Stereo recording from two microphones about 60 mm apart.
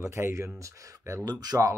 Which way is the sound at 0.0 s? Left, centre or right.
Right.